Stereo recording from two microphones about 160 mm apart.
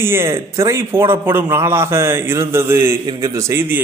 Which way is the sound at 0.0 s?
15° right (ahead or behind).